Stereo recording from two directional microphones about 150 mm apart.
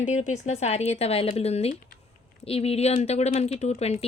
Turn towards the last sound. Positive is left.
turn(degrees=45)  # may be behind; listen again after turning